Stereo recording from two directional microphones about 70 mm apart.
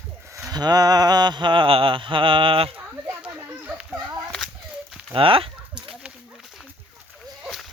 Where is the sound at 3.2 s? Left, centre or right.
Centre.